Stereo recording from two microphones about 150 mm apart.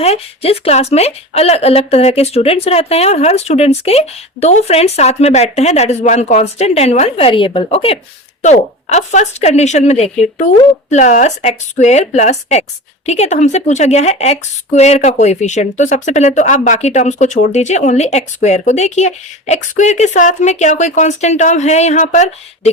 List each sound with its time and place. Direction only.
0.0 s a woman's voice: 45° left (ahead or behind)
8.4 s a woman's voice: 50° left (ahead or behind)